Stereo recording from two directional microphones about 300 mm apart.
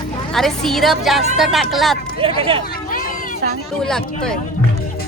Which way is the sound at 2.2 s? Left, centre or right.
Centre.